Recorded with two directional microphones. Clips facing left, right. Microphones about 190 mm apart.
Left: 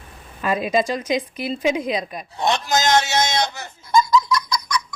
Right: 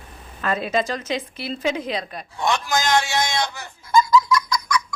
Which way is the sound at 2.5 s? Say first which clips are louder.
Left 2 dB; 40° left (ahead or behind).